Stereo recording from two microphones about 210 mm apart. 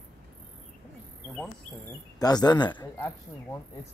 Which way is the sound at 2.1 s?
20° left (ahead or behind).